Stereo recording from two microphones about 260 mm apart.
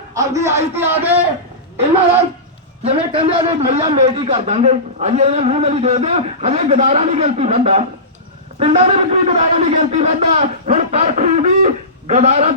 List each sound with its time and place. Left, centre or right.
0.1 s a man's voice: centre
2.8 s a man's voice: right